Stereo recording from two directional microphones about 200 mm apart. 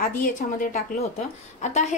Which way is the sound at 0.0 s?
45° left (ahead or behind).